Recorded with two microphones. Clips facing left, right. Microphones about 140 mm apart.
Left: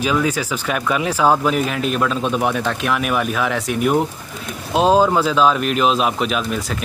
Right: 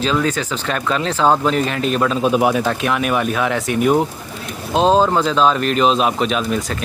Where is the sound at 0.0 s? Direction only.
10° left (ahead or behind).